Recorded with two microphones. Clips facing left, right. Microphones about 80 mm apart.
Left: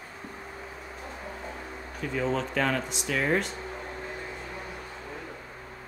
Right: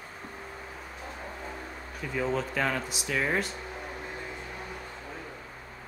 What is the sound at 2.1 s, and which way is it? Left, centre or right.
Speech, centre.